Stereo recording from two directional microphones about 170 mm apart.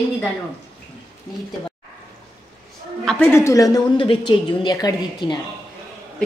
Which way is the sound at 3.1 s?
10° left (ahead or behind).